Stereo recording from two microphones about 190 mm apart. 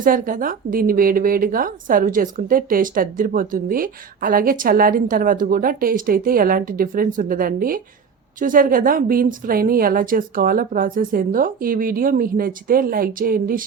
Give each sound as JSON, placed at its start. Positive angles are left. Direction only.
{"t": 0.0, "sound": "a woman's voice", "side_deg": -45}